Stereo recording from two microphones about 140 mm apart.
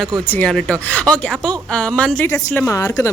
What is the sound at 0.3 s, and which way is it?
Speech, 10° left (ahead or behind).